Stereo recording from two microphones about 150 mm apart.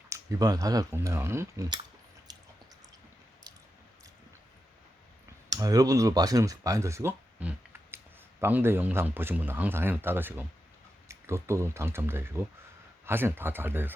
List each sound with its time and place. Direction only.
0.1 s speech: 25° right (ahead or behind)
2.3 s a sound: 30° right (ahead or behind)
5.5 s speech: 25° right (ahead or behind)